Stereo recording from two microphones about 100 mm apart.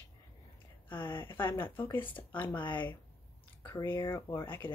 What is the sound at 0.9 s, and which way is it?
Speech, 20° left (ahead or behind).